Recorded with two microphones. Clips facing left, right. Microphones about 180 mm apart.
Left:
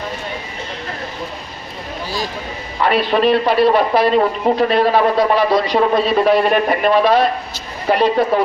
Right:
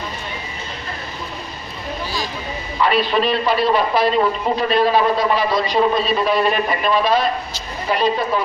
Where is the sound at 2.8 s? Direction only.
60° left (ahead or behind).